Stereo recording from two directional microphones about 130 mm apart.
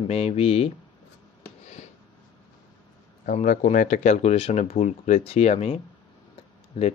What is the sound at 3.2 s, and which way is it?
Speech, 85° left.